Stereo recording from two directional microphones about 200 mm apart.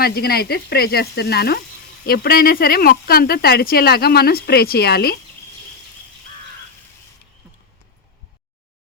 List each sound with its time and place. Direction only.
0.0 s speech: 50° left (ahead or behind)